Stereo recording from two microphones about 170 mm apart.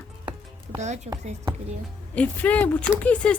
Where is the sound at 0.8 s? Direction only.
40° right (ahead or behind).